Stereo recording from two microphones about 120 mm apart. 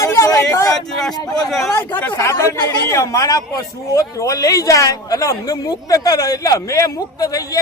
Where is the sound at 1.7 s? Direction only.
15° left (ahead or behind).